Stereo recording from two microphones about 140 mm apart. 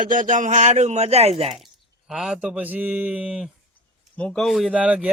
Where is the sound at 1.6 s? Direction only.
Centre (ahead or behind).